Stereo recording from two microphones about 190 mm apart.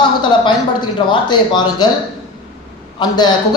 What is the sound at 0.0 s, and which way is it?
Speech, 25° left (ahead or behind).